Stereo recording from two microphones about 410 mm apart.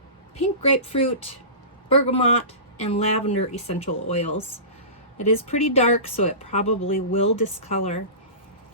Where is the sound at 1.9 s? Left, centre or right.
Centre.